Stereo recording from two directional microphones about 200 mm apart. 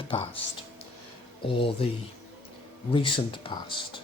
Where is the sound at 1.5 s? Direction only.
25° left (ahead or behind).